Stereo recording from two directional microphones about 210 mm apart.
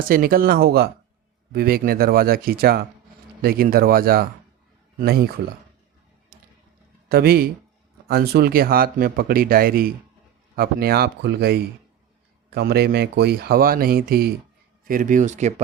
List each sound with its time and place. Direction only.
0.0 s speech: 45° right (ahead or behind)
7.1 s a man's voice: 45° right (ahead or behind)